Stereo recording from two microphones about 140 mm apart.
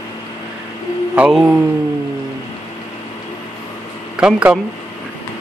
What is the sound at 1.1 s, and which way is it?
Mantra, 5° right (ahead or behind).